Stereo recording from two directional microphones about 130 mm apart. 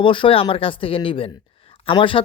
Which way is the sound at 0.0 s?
40° left (ahead or behind).